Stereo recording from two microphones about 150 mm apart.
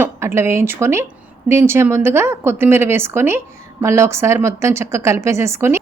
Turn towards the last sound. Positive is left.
turn(degrees=-20)  # may be behind; listen again after turning